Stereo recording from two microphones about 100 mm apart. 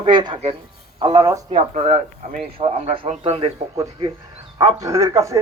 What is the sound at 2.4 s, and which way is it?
Speech, 85° right.